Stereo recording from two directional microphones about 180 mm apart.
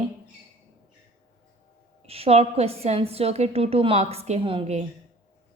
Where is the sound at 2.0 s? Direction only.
35° right (ahead or behind).